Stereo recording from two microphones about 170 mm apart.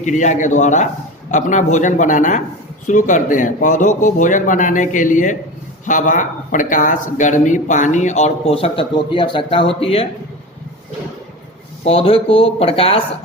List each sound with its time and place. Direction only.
0.0 s speech: 45° left (ahead or behind)
11.9 s speech: 35° left (ahead or behind)